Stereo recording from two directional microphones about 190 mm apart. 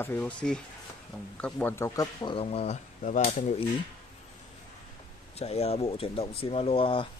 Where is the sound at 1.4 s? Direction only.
10° left (ahead or behind); by 3.5 s 40° left (ahead or behind).